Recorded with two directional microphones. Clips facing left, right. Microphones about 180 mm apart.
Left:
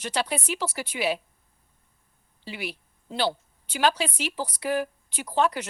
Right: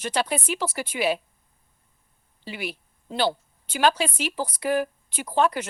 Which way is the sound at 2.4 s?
50° right (ahead or behind).